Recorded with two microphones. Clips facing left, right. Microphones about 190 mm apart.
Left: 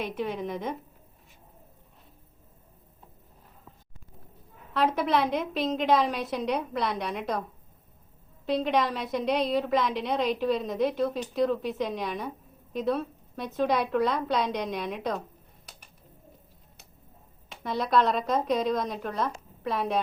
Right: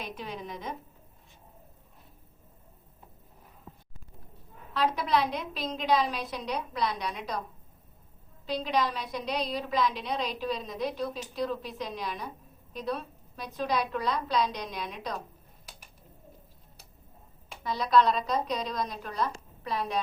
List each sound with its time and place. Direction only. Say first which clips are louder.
0.0 s a woman's voice: left 7 dB; 65° left (ahead or behind)
4.7 s a woman's voice: left 2 dB; 55° left (ahead or behind)
8.4 s a woman's voice: left 4 dB; 60° left (ahead or behind)
17.6 s a woman's voice: even; 60° left (ahead or behind)